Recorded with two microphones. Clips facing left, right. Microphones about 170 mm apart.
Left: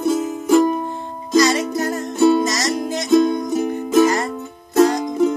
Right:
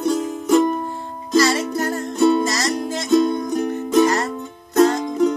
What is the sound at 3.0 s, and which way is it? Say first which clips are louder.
Music: left 2 dB; centre (ahead or behind).